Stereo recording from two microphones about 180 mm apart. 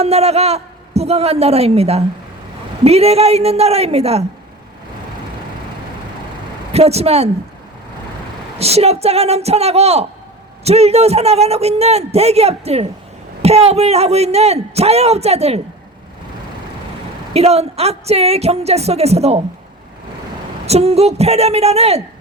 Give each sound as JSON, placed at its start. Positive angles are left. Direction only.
{"t": 0.0, "sound": "a man's voice", "side_deg": -35}
{"t": 6.7, "sound": "a man's voice", "side_deg": -35}
{"t": 8.5, "sound": "a man's voice", "side_deg": -35}
{"t": 17.3, "sound": "a man's voice", "side_deg": -35}
{"t": 20.7, "sound": "a man's voice", "side_deg": -35}